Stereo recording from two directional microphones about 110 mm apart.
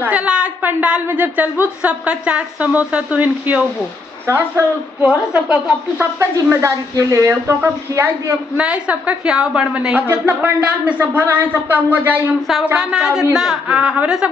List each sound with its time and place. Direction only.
0.0 s a woman's voice: 10° right (ahead or behind)
5.0 s a woman's voice: 10° right (ahead or behind)
6.1 s a woman's voice: 25° right (ahead or behind)
8.5 s a woman's voice: 10° right (ahead or behind)
12.7 s a woman's voice: 5° right (ahead or behind)